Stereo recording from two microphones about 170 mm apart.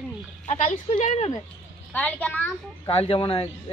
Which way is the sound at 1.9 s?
10° left (ahead or behind).